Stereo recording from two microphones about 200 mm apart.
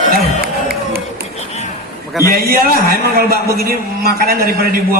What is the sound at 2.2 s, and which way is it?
A man's voice, 50° right (ahead or behind).